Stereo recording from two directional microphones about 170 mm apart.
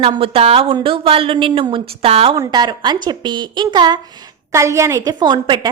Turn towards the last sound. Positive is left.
turn(degrees=-25)  # may be behind; listen again after turning